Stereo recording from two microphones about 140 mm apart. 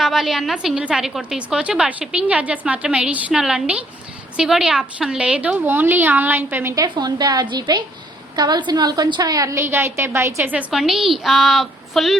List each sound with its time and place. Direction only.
0.0 s a woman's voice: centre (ahead or behind)
6.8 s a woman's voice: 30° right (ahead or behind); by 12.1 s centre (ahead or behind)